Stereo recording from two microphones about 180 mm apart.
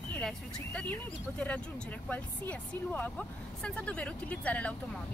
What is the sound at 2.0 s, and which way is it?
Speech, 10° left (ahead or behind).